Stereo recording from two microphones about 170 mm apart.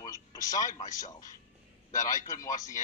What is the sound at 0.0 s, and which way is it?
Television, 20° left (ahead or behind).